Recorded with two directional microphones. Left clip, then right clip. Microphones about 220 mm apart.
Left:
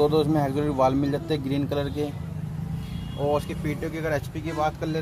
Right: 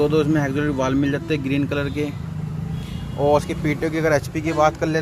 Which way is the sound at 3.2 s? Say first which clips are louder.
Right 7 dB; 15° right (ahead or behind).